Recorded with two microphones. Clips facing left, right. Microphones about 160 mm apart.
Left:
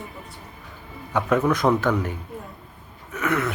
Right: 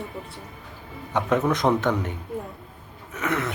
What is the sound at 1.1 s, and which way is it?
Speech, 25° right (ahead or behind).